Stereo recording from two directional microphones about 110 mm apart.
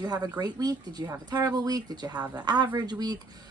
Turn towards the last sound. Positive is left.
turn(degrees=-35)  # may be behind; listen again after turning